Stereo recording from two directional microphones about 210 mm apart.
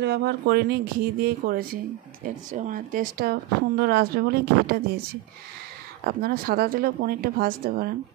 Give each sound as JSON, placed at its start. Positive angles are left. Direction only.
{"t": 0.0, "sound": "speech", "side_deg": -50}
{"t": 6.0, "sound": "speech", "side_deg": -45}